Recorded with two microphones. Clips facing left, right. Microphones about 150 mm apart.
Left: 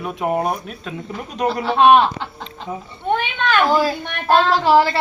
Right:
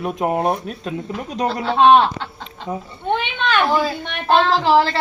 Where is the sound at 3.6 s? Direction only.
5° left (ahead or behind).